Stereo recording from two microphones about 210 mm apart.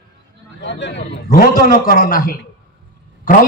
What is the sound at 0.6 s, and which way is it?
A man's voice, 55° left (ahead or behind).